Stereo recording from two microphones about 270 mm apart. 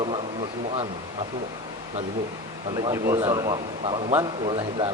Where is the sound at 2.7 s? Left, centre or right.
Centre.